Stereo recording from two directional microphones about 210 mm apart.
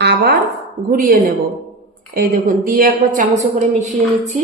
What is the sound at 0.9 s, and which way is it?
A woman's voice, 40° right (ahead or behind).